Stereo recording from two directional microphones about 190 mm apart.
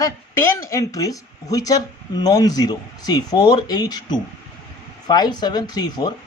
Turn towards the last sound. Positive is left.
turn(degrees=20)  # may be behind; listen again after turning